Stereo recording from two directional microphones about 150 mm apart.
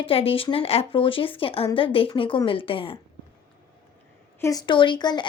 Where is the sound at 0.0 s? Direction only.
40° left (ahead or behind).